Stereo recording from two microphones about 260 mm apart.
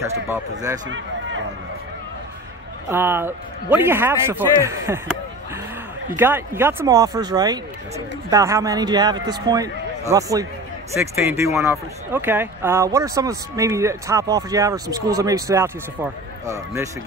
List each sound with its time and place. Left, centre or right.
0.0 s a man's voice: centre
0.8 s a sound: right
2.9 s a man's voice: centre
6.1 s a man's voice: centre